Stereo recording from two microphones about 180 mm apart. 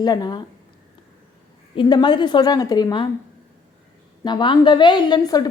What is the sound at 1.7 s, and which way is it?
A woman's voice, 25° left (ahead or behind).